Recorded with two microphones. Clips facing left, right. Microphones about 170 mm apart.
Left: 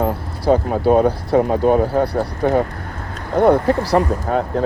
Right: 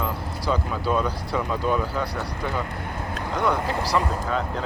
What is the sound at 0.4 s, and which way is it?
Speech, 55° left (ahead or behind).